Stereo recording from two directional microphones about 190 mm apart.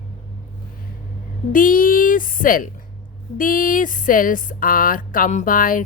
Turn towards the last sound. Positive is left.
turn(degrees=45)  # may be behind; listen again after turning